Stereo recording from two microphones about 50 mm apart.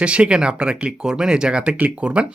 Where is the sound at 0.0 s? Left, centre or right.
Right.